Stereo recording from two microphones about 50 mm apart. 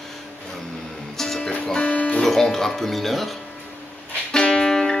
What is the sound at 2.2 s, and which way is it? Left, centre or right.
Speech, centre.